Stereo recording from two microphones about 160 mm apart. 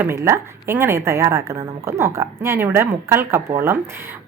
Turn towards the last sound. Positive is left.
turn(degrees=-15)  # may be behind; listen again after turning